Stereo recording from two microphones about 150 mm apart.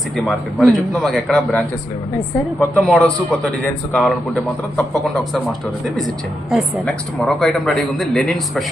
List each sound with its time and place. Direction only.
0.3 s a woman's voice: centre (ahead or behind)
2.7 s a man's voice: 10° left (ahead or behind)
6.5 s a woman's voice: centre (ahead or behind)